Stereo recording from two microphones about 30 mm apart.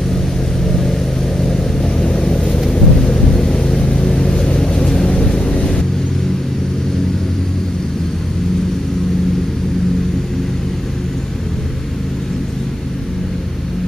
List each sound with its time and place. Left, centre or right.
0.7 s vehicle: centre
2.0 s vehicle: left
2.7 s thunder: centre
3.9 s vehicle: left
5.6 s vehicle: left